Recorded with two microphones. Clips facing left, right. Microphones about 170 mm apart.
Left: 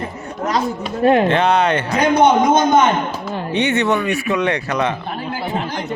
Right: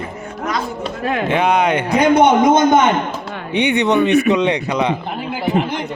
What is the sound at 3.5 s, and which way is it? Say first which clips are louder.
Speech: right 2 dB; 15° right (ahead or behind).